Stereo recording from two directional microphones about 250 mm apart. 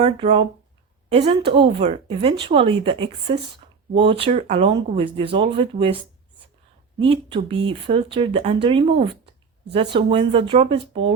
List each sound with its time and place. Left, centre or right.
0.0 s speech: right
7.0 s speech: right